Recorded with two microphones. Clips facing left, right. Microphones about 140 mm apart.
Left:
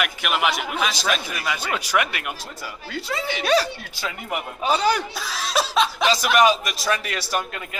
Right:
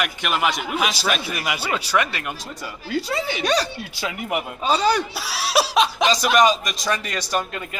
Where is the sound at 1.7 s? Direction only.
10° left (ahead or behind).